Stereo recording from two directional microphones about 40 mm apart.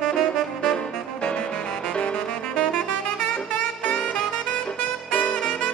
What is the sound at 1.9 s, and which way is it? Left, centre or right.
Saxophone, left.